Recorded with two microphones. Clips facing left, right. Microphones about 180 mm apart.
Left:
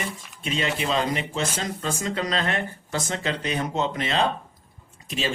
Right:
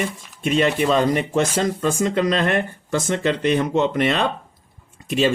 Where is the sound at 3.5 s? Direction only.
60° right (ahead or behind).